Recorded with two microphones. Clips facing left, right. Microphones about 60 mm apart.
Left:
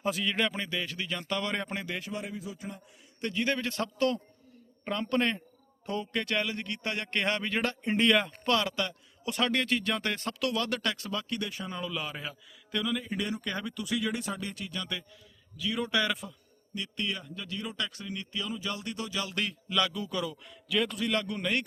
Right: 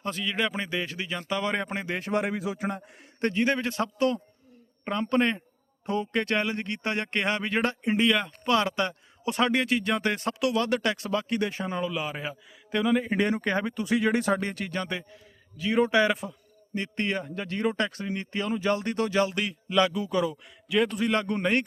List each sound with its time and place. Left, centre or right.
0.0 s a man's voice: centre
0.5 s a man's voice: right
2.1 s a man's voice: right
3.4 s a man's voice: right
7.2 s a man's voice: centre
7.9 s a man's voice: centre
8.4 s a man's voice: right
11.8 s a man's voice: centre; by 14.2 s right
14.2 s speech: right
15.5 s a man's voice: right
16.7 s speech: right
19.3 s a man's voice: centre